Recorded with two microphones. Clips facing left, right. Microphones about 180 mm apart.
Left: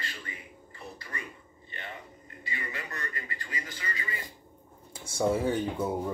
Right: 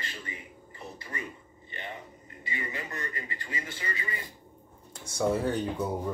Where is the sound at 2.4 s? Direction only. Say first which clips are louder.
Right 2 dB; 20° right (ahead or behind).